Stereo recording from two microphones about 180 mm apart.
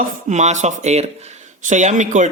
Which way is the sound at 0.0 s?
40° right (ahead or behind).